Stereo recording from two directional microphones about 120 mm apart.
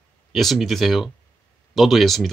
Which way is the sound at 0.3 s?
Centre (ahead or behind).